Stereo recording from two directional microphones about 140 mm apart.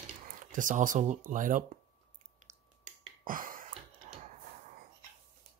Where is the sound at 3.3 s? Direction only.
75° right (ahead or behind).